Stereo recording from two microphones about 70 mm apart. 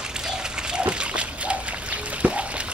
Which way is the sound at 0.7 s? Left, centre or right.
Centre.